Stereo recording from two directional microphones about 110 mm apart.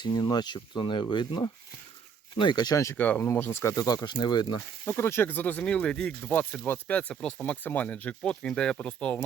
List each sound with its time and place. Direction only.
0.0 s speech: 40° left (ahead or behind)
3.0 s speech: 15° left (ahead or behind); by 4.4 s 40° left (ahead or behind)
4.9 s speech: 20° left (ahead or behind)